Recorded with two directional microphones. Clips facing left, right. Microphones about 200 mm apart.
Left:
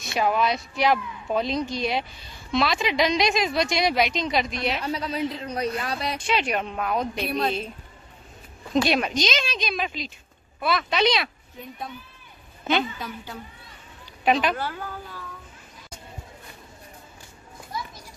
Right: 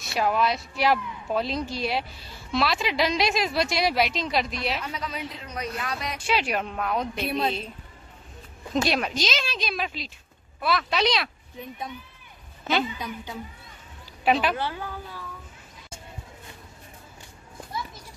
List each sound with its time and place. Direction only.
0.0 s a child's voice: centre (ahead or behind)
4.8 s a woman's voice: 35° left (ahead or behind)
6.2 s a child's voice: 5° right (ahead or behind)
8.8 s a child's voice: centre (ahead or behind)
12.8 s a woman's voice: 15° right (ahead or behind)
14.2 s a child's voice: 5° right (ahead or behind)